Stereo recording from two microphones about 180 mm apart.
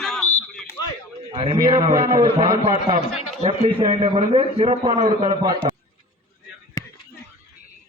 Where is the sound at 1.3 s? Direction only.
30° right (ahead or behind).